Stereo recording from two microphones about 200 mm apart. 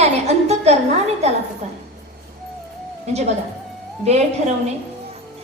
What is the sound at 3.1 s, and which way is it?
A woman's voice, 35° right (ahead or behind).